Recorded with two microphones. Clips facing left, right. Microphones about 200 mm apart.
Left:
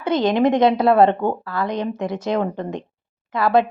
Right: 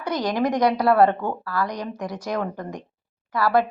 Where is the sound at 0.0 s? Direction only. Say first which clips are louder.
Left 6 dB; 25° left (ahead or behind).